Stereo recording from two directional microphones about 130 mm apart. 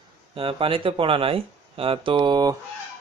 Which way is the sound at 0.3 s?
45° right (ahead or behind).